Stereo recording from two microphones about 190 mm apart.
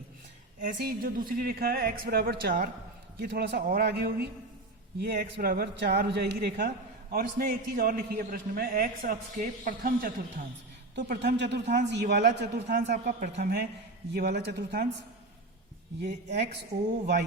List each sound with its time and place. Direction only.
0.6 s a man's voice: 45° right (ahead or behind)
10.9 s a man's voice: 60° right (ahead or behind)
12.8 s speech: 40° right (ahead or behind)
13.3 s a man's voice: 55° right (ahead or behind)
16.0 s a man's voice: 60° right (ahead or behind)